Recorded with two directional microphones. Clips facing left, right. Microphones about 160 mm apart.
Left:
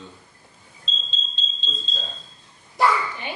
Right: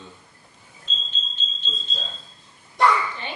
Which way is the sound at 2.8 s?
5° left (ahead or behind).